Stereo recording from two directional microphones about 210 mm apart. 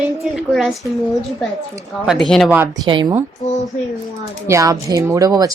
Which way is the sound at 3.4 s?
35° left (ahead or behind).